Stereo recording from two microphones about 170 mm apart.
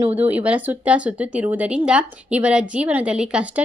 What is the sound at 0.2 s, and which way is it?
Speech, 10° right (ahead or behind).